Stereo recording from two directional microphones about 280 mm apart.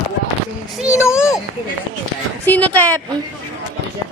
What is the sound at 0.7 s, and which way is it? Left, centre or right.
Speech, centre.